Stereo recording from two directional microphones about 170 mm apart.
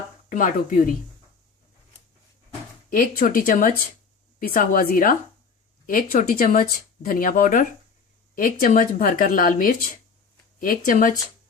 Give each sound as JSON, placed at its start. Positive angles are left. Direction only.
{"t": 0.3, "sound": "speech", "side_deg": 50}
{"t": 2.9, "sound": "speech", "side_deg": 55}